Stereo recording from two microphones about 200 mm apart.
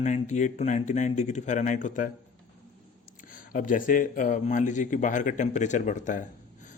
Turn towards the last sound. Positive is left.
turn(degrees=40)  # may be behind; listen again after turning